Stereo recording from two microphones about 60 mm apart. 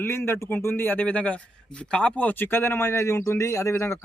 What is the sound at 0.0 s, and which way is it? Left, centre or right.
A man's voice, left.